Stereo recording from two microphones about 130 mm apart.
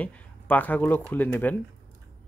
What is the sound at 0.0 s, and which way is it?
Speech, 15° left (ahead or behind).